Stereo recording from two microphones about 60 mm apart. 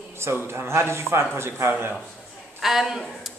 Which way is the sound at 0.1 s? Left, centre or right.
Right.